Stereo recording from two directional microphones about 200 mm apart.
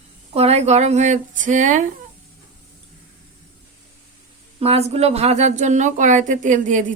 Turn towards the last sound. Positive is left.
turn(degrees=-40)  # may be behind; listen again after turning